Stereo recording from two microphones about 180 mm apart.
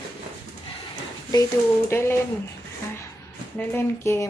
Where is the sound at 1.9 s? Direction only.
15° left (ahead or behind).